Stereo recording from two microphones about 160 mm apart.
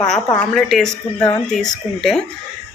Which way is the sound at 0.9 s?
20° left (ahead or behind).